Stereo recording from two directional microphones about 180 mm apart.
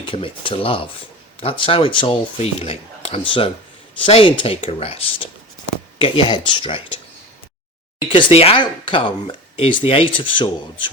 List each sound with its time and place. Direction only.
0.0 s speech: 30° left (ahead or behind)
8.1 s speech: 35° left (ahead or behind)